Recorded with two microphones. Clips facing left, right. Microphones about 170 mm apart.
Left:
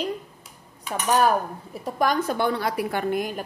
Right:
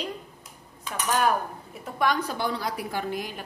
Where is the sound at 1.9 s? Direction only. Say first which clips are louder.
Left 3 dB; 45° left (ahead or behind).